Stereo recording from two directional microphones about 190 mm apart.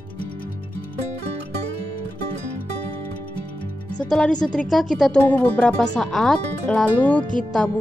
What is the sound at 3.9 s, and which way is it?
Speech, 5° left (ahead or behind).